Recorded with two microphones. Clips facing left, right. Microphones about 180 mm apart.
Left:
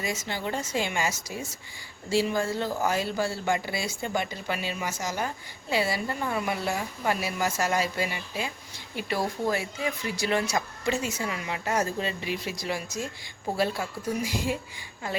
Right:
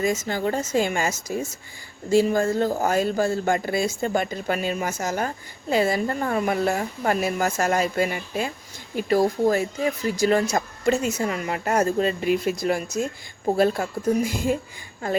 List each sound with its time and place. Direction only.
0.0 s speech: 45° right (ahead or behind)